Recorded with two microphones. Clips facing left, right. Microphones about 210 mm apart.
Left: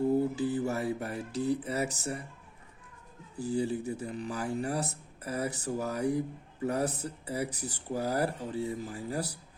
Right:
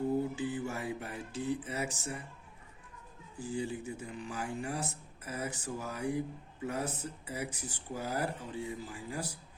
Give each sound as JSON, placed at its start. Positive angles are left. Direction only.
{"t": 0.3, "sound": "speech", "side_deg": 40}
{"t": 3.3, "sound": "speech", "side_deg": 40}